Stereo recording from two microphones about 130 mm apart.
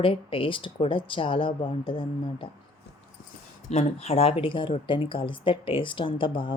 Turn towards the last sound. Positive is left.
turn(degrees=40)  # may be behind; listen again after turning